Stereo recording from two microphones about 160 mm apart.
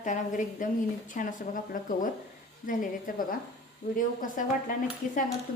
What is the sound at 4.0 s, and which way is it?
Speech, 55° left (ahead or behind).